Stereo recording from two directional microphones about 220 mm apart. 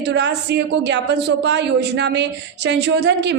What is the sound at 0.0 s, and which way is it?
A woman's voice, 50° right (ahead or behind).